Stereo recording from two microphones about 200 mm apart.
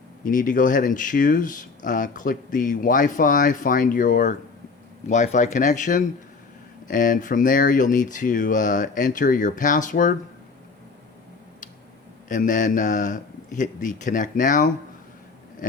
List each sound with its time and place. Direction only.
0.3 s speech: 40° left (ahead or behind)
12.3 s speech: 40° left (ahead or behind)